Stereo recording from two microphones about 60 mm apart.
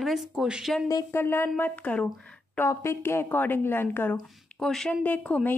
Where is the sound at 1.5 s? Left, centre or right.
Left.